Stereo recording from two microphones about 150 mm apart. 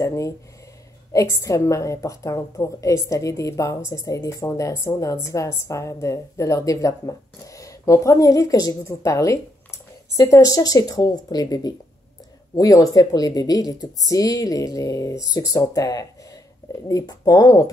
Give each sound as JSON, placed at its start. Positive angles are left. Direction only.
{"t": 0.0, "sound": "a woman's voice", "side_deg": 20}